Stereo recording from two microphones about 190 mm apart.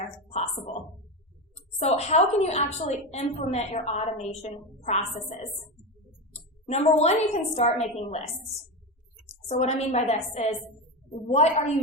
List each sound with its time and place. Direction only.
1.8 s a woman's voice: 35° left (ahead or behind)
6.7 s a woman's voice: 35° left (ahead or behind)
9.5 s a woman's voice: 35° left (ahead or behind)